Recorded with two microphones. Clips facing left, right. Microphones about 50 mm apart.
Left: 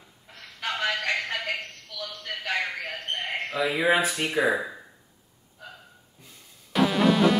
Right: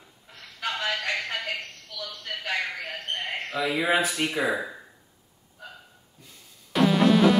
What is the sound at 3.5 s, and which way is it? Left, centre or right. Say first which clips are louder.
Speech: left 1 dB; centre.